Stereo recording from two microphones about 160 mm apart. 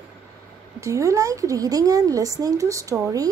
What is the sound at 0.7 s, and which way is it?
A woman's voice, 20° right (ahead or behind).